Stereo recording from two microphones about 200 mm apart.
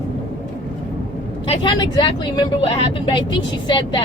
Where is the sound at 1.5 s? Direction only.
25° left (ahead or behind).